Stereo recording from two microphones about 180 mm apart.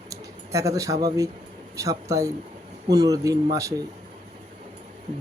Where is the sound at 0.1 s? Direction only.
20° right (ahead or behind).